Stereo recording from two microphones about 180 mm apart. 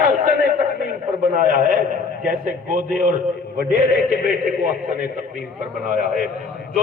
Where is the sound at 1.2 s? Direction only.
50° right (ahead or behind).